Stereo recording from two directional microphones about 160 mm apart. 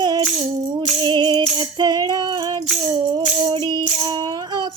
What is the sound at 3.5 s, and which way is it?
Music, 25° right (ahead or behind).